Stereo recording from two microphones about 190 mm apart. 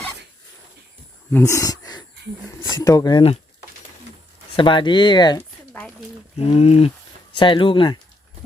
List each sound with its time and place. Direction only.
1.3 s speech: 15° left (ahead or behind)
4.5 s speech: 25° left (ahead or behind)
6.4 s speech: 30° left (ahead or behind)